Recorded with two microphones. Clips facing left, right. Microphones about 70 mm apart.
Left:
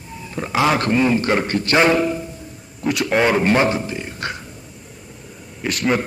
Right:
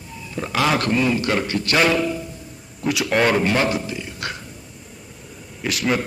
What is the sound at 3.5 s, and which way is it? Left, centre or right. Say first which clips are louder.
Speech: left 3 dB; left.